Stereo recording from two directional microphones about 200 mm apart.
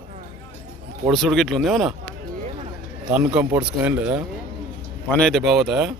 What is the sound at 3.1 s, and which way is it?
Speech, 5° right (ahead or behind).